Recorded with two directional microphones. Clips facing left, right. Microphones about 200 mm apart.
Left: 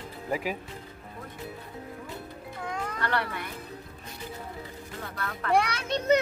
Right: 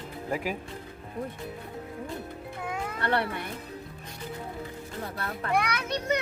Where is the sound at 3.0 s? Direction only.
25° right (ahead or behind).